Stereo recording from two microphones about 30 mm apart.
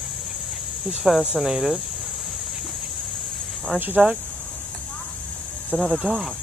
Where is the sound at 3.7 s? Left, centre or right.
Right.